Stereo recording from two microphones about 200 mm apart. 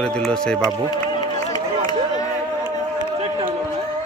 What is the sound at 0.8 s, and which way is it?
Run, 20° left (ahead or behind).